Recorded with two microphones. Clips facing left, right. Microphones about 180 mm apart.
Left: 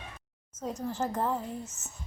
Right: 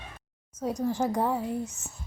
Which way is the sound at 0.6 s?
10° right (ahead or behind).